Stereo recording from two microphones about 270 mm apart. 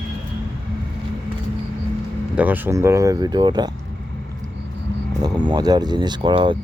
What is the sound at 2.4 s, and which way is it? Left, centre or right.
Speech, centre.